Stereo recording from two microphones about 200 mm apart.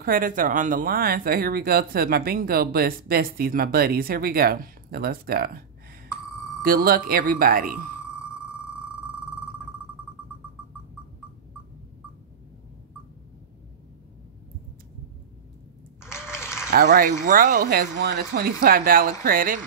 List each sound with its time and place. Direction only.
0.0 s speech: 45° right (ahead or behind)
6.6 s speech: 45° right (ahead or behind)
8.0 s music: 5° right (ahead or behind)
16.0 s a sound: 10° left (ahead or behind)
16.7 s speech: 50° right (ahead or behind)